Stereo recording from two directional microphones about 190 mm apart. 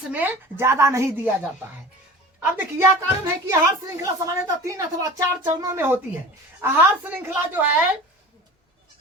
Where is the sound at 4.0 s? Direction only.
20° right (ahead or behind).